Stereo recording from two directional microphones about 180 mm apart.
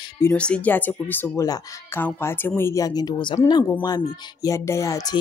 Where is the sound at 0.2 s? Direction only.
10° left (ahead or behind).